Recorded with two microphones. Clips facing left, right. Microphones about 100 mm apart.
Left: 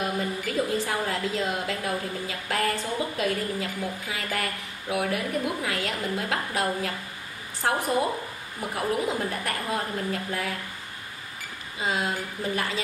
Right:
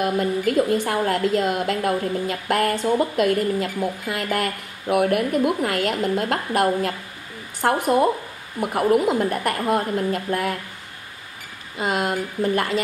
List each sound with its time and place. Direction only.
0.0 s a woman's voice: 60° right (ahead or behind)
11.8 s a woman's voice: 65° right (ahead or behind)